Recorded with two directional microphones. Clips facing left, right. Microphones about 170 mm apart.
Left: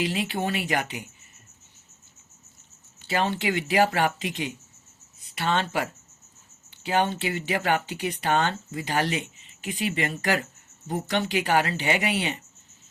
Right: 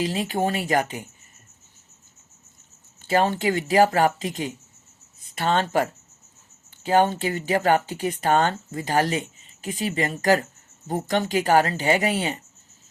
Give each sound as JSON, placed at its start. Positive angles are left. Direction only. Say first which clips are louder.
{"t": 0.0, "sound": "speech", "louder": "right 3 dB", "side_deg": -40}
{"t": 3.0, "sound": "speech", "louder": "right 5 dB", "side_deg": -45}